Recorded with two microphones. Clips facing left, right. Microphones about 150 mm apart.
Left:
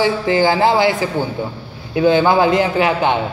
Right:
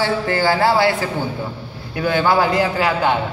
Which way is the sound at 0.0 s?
20° left (ahead or behind).